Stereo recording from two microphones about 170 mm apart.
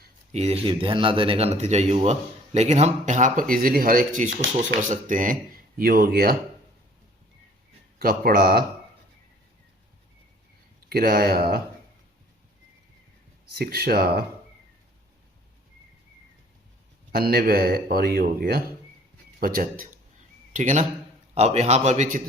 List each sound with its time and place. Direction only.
0.3 s speech: 40° right (ahead or behind); by 6.3 s 60° right (ahead or behind)
7.9 s speech: 60° right (ahead or behind)
10.8 s speech: 60° right (ahead or behind)
13.5 s speech: 65° right (ahead or behind)
17.1 s speech: 65° right (ahead or behind)
20.5 s speech: 45° right (ahead or behind)